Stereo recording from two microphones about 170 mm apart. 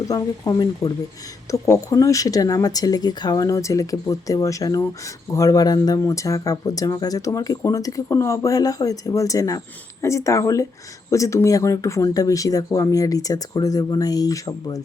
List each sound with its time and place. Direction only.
0.1 s speech: 20° left (ahead or behind)